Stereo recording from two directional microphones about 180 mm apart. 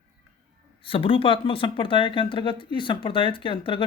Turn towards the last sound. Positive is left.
turn(degrees=30)  # may be behind; listen again after turning